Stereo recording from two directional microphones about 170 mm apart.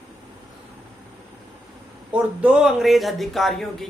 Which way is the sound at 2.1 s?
5° right (ahead or behind).